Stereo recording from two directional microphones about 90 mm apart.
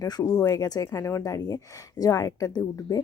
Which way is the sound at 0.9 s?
30° left (ahead or behind).